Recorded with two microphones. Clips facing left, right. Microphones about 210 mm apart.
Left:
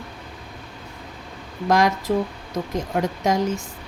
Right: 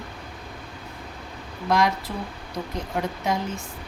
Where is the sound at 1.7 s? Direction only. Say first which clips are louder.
Left 4 dB; 45° left (ahead or behind).